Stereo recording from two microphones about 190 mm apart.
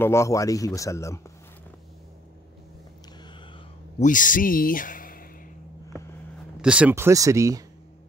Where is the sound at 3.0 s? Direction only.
25° left (ahead or behind).